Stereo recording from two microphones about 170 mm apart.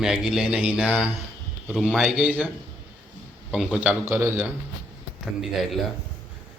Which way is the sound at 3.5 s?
5° right (ahead or behind).